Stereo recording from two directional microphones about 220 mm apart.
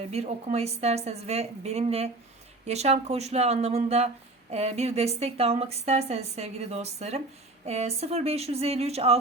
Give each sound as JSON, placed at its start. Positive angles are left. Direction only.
{"t": 0.1, "sound": "a woman's voice", "side_deg": -30}